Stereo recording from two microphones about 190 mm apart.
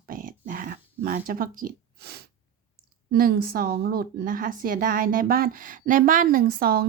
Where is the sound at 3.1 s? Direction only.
50° right (ahead or behind).